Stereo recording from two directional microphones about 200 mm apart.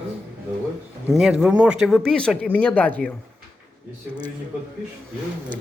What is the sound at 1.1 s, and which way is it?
Speech, 5° right (ahead or behind).